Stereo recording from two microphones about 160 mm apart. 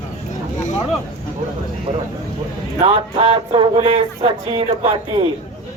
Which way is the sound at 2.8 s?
35° right (ahead or behind).